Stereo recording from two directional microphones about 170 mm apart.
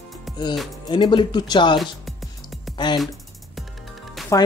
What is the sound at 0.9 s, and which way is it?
Speech, 30° left (ahead or behind).